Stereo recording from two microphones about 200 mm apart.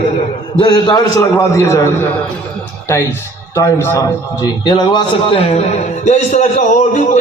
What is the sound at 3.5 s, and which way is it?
A man's voice, 15° left (ahead or behind).